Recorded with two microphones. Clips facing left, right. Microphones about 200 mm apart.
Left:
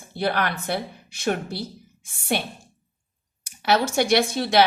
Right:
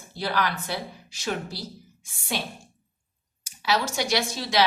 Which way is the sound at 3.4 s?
60° left (ahead or behind).